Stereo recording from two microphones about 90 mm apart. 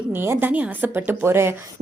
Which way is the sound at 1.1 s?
25° right (ahead or behind).